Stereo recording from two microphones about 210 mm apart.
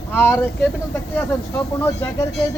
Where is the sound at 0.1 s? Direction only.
10° left (ahead or behind).